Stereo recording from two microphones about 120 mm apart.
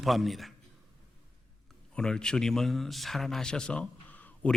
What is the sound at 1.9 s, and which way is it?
A man's voice, 5° left (ahead or behind).